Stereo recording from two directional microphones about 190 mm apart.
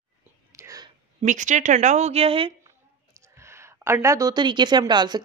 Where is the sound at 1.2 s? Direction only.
40° right (ahead or behind).